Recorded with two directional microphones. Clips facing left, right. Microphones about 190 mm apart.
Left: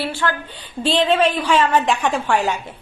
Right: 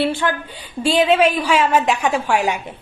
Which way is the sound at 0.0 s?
20° right (ahead or behind).